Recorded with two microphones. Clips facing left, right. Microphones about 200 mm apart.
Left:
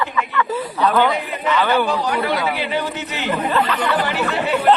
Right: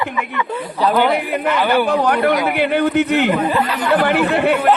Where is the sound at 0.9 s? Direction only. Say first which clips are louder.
Right 4 dB; 10° right (ahead or behind).